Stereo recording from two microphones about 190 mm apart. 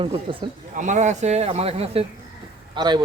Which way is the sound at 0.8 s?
40° right (ahead or behind).